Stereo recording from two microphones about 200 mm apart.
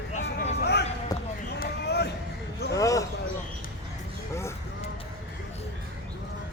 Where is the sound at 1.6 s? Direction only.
55° left (ahead or behind).